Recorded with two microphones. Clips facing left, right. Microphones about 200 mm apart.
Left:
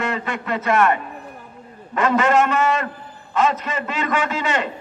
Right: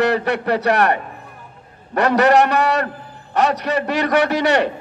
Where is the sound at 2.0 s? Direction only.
70° right (ahead or behind).